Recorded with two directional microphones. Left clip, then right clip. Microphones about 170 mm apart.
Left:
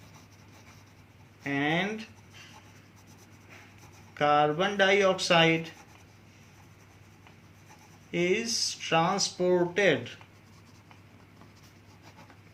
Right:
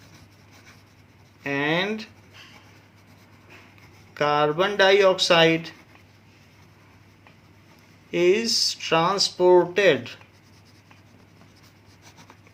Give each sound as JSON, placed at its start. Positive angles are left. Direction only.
{"t": 1.5, "sound": "a sound", "side_deg": -60}
{"t": 4.1, "sound": "speech", "side_deg": -60}
{"t": 8.1, "sound": "speech", "side_deg": -55}